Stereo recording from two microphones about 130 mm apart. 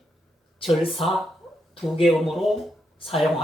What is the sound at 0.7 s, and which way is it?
Speech, centre (ahead or behind).